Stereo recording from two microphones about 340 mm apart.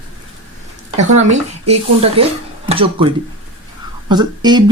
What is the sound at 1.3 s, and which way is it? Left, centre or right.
Speech, centre.